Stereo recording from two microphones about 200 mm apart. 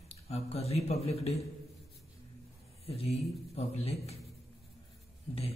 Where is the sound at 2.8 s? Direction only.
30° left (ahead or behind).